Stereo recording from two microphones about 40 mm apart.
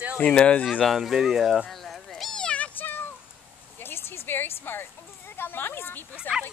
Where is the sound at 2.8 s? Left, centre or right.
Left.